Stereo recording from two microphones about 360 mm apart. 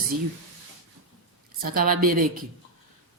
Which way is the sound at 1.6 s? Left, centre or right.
Right.